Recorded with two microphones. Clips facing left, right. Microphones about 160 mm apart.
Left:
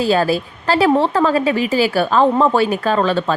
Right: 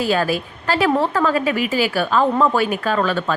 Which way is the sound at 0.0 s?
35° left (ahead or behind).